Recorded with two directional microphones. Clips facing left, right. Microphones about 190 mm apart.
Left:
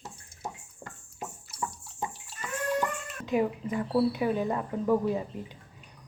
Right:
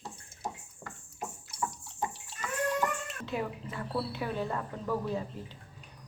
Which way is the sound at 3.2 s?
15° left (ahead or behind).